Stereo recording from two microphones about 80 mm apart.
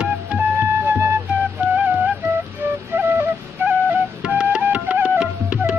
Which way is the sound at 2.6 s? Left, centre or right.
Right.